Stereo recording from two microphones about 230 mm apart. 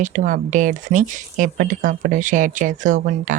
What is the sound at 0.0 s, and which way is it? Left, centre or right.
Speech, right.